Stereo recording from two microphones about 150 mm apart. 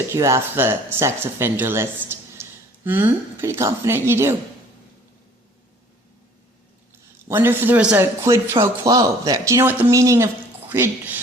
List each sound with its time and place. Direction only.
0.1 s a man's voice: 20° right (ahead or behind)
7.3 s a man's voice: 15° right (ahead or behind)